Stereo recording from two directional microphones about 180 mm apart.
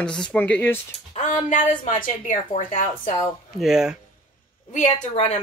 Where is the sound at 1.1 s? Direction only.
45° left (ahead or behind).